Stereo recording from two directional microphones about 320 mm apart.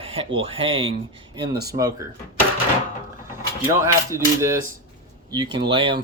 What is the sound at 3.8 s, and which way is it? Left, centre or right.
Speech, centre.